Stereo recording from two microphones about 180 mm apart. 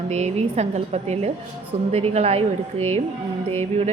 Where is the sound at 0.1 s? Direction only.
40° right (ahead or behind).